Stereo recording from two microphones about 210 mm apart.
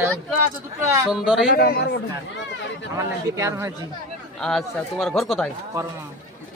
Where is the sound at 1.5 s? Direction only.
50° left (ahead or behind).